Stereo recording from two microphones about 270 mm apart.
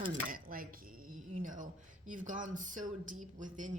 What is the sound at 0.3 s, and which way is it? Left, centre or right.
Speech, right.